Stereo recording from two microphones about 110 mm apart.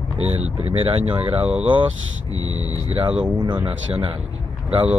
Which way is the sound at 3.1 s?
10° right (ahead or behind).